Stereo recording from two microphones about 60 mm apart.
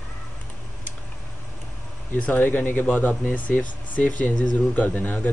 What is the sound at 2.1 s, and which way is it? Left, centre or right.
Speech, left.